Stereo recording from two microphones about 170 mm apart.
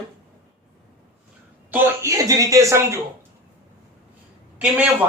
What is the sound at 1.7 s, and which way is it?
Speech, 15° right (ahead or behind).